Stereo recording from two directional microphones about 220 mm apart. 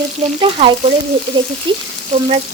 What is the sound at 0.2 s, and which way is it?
Speech, 25° right (ahead or behind).